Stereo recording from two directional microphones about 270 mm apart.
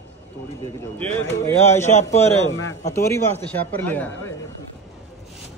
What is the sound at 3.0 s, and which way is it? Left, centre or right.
Speech, centre.